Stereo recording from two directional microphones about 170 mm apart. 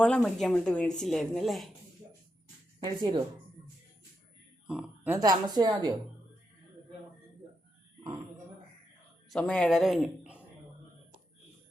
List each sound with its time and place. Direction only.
0.0 s a woman's voice: 5° left (ahead or behind)
2.8 s a woman's voice: 25° right (ahead or behind)
4.6 s a sound: 5° right (ahead or behind)
5.1 s a woman's voice: 20° right (ahead or behind)
9.3 s speech: 5° left (ahead or behind)